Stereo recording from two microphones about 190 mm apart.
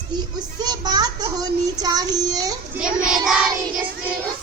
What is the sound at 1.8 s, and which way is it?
Child singing, 20° right (ahead or behind).